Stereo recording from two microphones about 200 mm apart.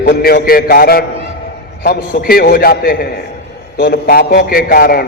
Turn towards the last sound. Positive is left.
turn(degrees=50)  # may be behind; listen again after turning